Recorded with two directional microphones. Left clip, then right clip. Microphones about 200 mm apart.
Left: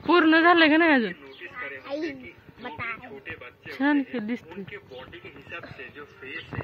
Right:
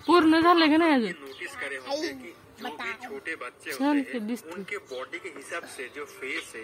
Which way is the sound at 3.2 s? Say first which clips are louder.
Right 4 dB; 60° right (ahead or behind).